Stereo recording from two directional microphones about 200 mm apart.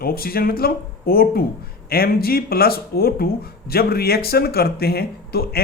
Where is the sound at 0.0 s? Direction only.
50° left (ahead or behind).